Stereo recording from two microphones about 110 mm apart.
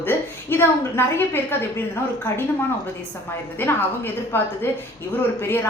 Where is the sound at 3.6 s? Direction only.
20° left (ahead or behind).